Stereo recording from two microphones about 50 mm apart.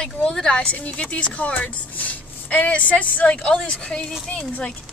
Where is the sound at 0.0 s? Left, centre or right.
Centre.